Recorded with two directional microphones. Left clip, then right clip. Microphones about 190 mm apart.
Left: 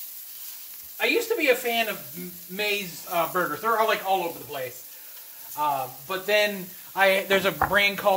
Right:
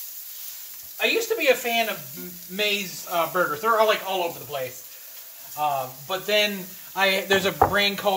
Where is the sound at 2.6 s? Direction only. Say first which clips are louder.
Right 2 dB; 15° left (ahead or behind).